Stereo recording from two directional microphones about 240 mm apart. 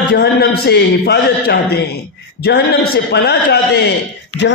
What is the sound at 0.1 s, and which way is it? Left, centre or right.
A man's voice, left.